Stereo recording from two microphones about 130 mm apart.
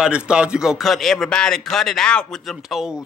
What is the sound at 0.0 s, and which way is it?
A man's voice, 5° right (ahead or behind).